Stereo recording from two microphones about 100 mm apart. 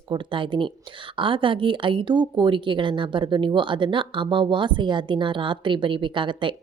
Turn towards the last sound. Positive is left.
turn(degrees=-55)  # may be behind; listen again after turning